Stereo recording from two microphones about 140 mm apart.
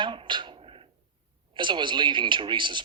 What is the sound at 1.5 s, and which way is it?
A man's voice, 35° right (ahead or behind).